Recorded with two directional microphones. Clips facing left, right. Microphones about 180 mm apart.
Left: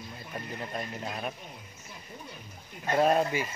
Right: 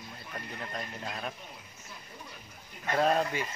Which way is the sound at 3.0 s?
10° left (ahead or behind).